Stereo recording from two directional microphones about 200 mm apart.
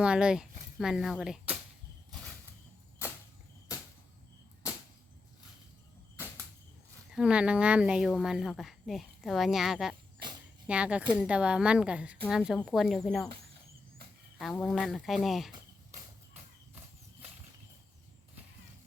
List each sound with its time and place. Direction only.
0.0 s speech: 5° right (ahead or behind)
7.2 s a woman's voice: 5° right (ahead or behind)
14.3 s a woman's voice: centre (ahead or behind)
15.5 s a sound: 40° right (ahead or behind)